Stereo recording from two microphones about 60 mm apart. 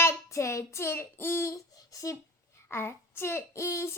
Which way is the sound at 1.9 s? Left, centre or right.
Left.